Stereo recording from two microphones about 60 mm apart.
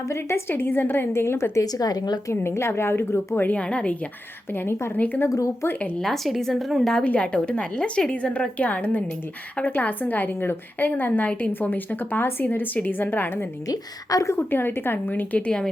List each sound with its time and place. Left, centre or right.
0.1 s a woman's voice: left
1.5 s a woman's voice: left
2.3 s a woman's voice: left
3.4 s a woman's voice: left
4.5 s a woman's voice: left
4.9 s a woman's voice: left
6.0 s a woman's voice: centre
7.0 s a woman's voice: left
13.7 s speech: left
14.3 s a woman's voice: left
15.1 s a woman's voice: left